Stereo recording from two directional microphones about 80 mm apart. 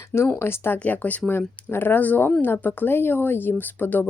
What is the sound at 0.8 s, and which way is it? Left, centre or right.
Speech, centre.